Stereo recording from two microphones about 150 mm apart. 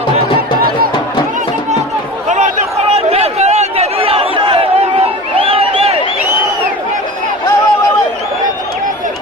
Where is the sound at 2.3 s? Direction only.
45° right (ahead or behind).